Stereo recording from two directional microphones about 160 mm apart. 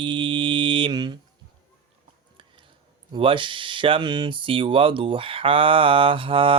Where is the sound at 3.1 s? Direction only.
30° right (ahead or behind).